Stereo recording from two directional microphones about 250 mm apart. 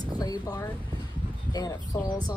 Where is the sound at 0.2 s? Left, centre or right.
Centre.